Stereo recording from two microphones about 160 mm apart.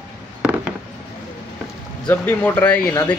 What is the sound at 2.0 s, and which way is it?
Speech, 10° left (ahead or behind).